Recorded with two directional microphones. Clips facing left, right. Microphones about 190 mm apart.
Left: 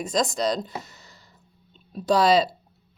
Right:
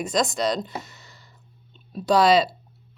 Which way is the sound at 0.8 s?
40° left (ahead or behind).